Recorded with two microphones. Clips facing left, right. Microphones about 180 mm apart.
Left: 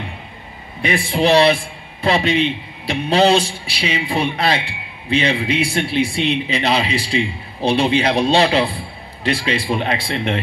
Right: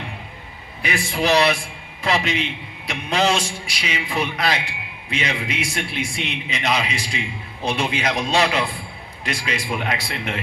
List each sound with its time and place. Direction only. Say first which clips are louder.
0.8 s a man's voice: left 5 dB; 30° left (ahead or behind)